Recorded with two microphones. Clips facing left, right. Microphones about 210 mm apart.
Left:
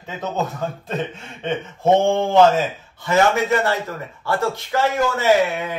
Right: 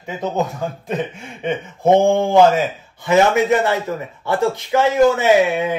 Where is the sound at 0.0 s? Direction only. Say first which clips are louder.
Right 4 dB; 10° right (ahead or behind).